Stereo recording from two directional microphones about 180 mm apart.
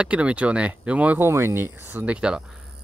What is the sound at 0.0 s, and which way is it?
Speech, 5° right (ahead or behind).